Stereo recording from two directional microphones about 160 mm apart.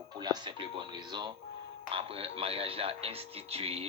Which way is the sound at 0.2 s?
25° right (ahead or behind).